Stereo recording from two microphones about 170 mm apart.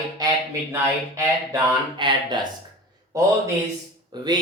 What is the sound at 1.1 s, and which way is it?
Speech, 25° right (ahead or behind).